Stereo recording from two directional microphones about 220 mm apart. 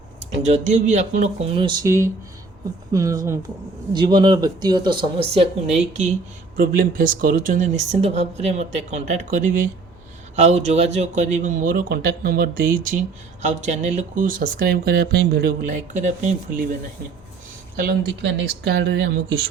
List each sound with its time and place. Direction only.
0.4 s speech: 30° right (ahead or behind)
17.7 s speech: 45° right (ahead or behind)